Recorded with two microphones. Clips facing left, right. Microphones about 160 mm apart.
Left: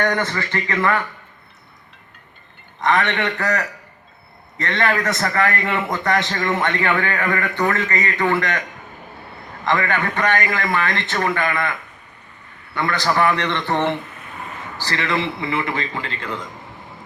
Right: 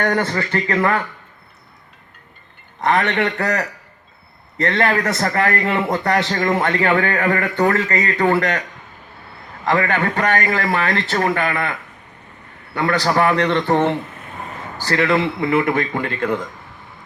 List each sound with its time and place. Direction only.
0.0 s a man's voice: 35° right (ahead or behind)
2.8 s a man's voice: 35° right (ahead or behind)
9.6 s a man's voice: 35° right (ahead or behind)
14.8 s a man's voice: 50° right (ahead or behind)